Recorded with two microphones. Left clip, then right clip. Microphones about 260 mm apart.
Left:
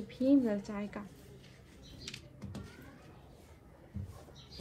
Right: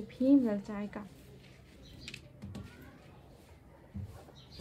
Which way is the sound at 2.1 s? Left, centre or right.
Centre.